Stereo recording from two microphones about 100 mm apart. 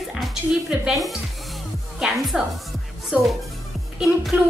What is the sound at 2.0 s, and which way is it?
A woman's voice, 5° right (ahead or behind).